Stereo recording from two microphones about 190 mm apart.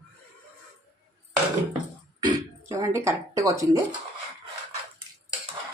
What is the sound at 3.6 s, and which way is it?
Speech, 15° right (ahead or behind).